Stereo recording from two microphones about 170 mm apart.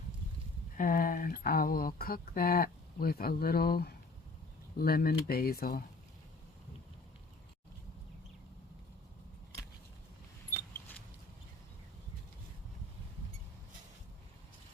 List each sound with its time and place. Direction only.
0.8 s mantra: 55° left (ahead or behind)